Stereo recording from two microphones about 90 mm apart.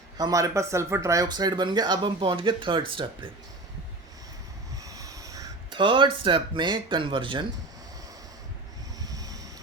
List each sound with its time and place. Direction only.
0.2 s speech: 40° right (ahead or behind); by 3.3 s 65° right (ahead or behind)
4.8 s vehicle: 40° right (ahead or behind)
5.7 s speech: 65° right (ahead or behind)
9.0 s a sound: 40° right (ahead or behind)